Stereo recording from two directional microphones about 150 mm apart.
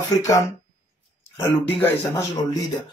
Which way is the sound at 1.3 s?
15° left (ahead or behind).